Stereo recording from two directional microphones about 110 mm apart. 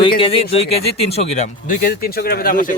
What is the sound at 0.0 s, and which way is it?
Speech, 50° left (ahead or behind).